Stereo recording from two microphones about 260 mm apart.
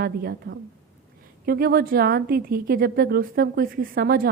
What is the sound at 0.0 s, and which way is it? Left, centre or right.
A woman's voice, right.